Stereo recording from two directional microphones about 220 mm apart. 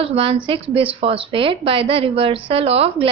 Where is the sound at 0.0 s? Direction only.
25° right (ahead or behind).